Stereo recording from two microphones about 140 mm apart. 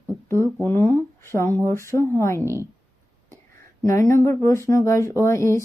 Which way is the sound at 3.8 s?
20° left (ahead or behind).